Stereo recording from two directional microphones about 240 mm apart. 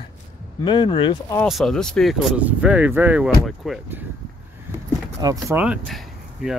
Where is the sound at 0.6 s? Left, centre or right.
Centre.